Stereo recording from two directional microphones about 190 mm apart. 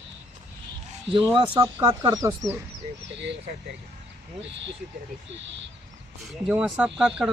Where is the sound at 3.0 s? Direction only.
70° right (ahead or behind).